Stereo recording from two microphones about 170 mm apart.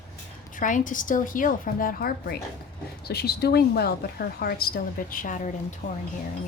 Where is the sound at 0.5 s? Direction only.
50° left (ahead or behind).